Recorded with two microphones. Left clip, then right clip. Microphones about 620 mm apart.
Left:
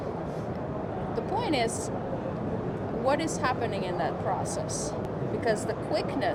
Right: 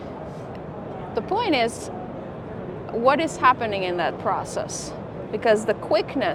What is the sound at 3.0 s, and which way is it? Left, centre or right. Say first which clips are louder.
Speech: right 10 dB; right.